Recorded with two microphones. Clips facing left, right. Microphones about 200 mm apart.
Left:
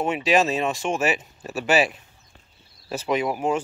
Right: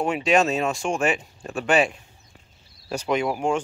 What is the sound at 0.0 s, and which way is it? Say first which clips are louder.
Speech: even; centre (ahead or behind).